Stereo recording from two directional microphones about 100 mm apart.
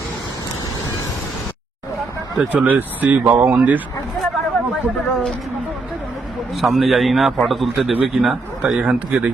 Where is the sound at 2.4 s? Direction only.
10° right (ahead or behind).